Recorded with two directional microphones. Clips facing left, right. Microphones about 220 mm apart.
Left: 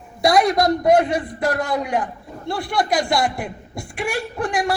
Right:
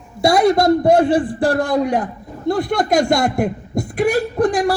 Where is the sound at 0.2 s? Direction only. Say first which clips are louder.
Right 3 dB; 25° right (ahead or behind).